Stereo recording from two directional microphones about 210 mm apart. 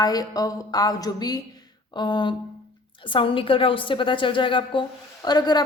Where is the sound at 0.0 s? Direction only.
15° left (ahead or behind).